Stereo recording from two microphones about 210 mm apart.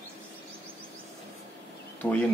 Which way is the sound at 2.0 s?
5° left (ahead or behind).